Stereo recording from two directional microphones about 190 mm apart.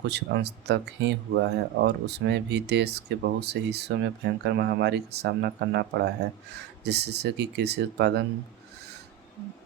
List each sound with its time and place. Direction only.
0.1 s speech: 60° right (ahead or behind)